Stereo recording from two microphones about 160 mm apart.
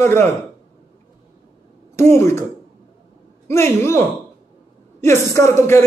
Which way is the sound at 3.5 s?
15° left (ahead or behind).